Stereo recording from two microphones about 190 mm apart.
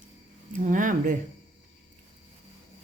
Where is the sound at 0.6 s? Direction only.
45° right (ahead or behind).